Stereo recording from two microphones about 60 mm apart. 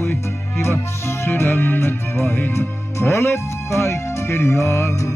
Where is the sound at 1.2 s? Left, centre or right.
Left.